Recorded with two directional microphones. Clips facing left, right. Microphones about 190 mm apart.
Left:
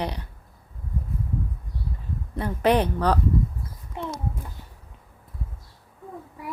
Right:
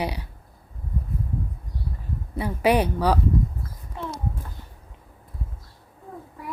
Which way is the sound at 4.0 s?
20° left (ahead or behind).